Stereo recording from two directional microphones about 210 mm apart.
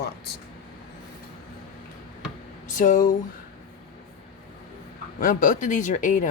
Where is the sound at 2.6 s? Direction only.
35° left (ahead or behind).